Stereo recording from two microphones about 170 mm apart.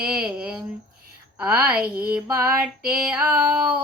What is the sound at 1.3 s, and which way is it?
Speech, 5° right (ahead or behind).